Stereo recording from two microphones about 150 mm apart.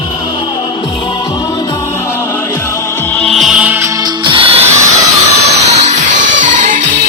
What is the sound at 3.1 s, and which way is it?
Music, 5° left (ahead or behind).